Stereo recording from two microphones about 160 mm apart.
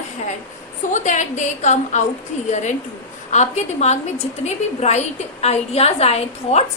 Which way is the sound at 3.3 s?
45° left (ahead or behind).